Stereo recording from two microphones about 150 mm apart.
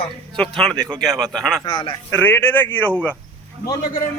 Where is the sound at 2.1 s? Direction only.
10° left (ahead or behind).